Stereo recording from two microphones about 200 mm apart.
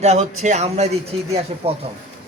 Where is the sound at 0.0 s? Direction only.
35° right (ahead or behind).